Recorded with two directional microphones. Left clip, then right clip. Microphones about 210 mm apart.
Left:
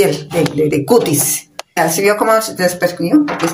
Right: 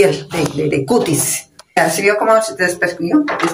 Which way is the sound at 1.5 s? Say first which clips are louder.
Right 1 dB; 5° left (ahead or behind).